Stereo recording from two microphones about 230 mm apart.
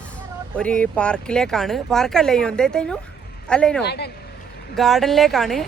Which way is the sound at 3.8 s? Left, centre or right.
Left.